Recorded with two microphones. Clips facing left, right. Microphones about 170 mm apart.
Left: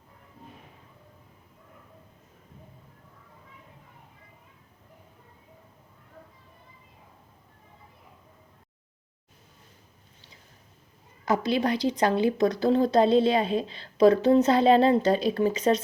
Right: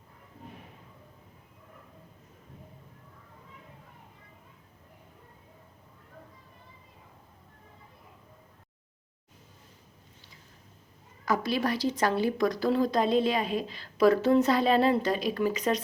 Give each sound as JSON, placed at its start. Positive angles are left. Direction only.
{"t": 11.3, "sound": "a woman's voice", "side_deg": 20}